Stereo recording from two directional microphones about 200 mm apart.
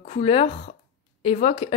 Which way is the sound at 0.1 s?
30° left (ahead or behind).